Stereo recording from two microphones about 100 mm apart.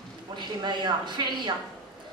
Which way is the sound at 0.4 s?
50° right (ahead or behind).